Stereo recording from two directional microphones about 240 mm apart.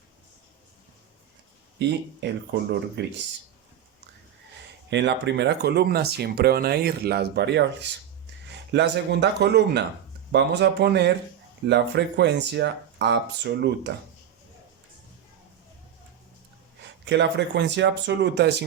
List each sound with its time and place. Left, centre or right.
1.8 s speech: right
4.9 s speech: right
17.1 s speech: right